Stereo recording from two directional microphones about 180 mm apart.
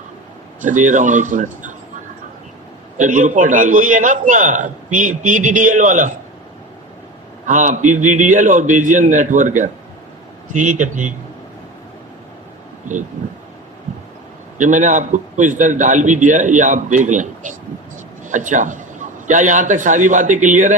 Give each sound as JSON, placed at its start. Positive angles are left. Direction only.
{"t": 0.6, "sound": "a man's voice", "side_deg": -45}
{"t": 3.0, "sound": "a man's voice", "side_deg": -45}
{"t": 7.4, "sound": "a man's voice", "side_deg": -45}
{"t": 14.6, "sound": "a man's voice", "side_deg": -45}